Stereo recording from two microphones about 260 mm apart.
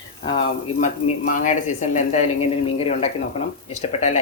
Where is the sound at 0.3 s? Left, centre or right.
Left.